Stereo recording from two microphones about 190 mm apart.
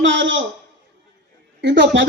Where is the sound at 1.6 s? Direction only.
70° right (ahead or behind).